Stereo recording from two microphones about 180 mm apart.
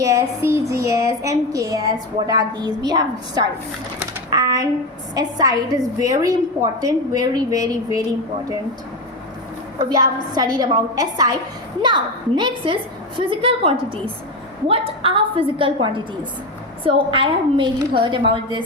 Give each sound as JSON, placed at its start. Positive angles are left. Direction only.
{"t": 0.0, "sound": "child singing", "side_deg": -15}
{"t": 0.7, "sound": "a woman's voice", "side_deg": -15}
{"t": 9.7, "sound": "a woman's voice", "side_deg": -20}